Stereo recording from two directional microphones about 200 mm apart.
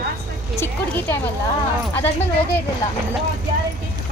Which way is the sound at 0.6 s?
10° left (ahead or behind).